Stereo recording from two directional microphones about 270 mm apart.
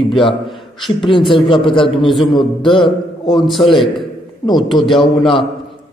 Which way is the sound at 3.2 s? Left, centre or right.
Centre.